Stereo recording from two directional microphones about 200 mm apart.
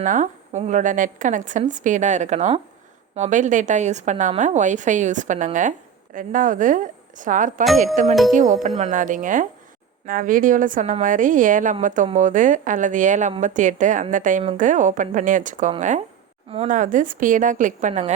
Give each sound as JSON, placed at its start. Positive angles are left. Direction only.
{"t": 0.0, "sound": "a woman's voice", "side_deg": -40}